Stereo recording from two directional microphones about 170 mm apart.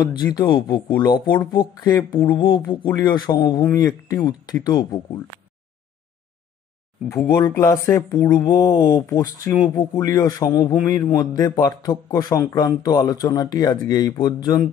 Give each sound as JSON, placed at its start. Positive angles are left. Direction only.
{"t": 0.0, "sound": "a man's voice", "side_deg": 25}
{"t": 7.1, "sound": "a man's voice", "side_deg": 15}